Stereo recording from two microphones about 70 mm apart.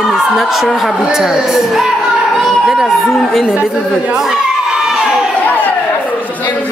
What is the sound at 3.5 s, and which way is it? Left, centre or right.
Speech, centre.